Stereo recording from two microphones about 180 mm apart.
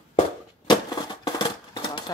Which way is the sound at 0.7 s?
25° left (ahead or behind).